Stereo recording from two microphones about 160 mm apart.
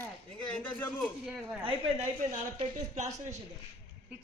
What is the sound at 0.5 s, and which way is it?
Speech, 10° left (ahead or behind).